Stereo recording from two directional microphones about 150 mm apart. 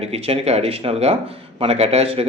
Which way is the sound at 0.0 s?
40° right (ahead or behind).